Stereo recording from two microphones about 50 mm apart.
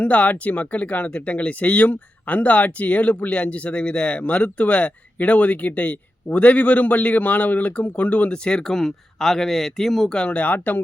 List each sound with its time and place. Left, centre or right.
0.0 s speech: left